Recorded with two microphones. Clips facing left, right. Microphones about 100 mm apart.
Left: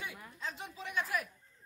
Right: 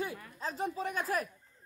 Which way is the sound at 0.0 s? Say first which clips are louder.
Right 6 dB; 40° right (ahead or behind).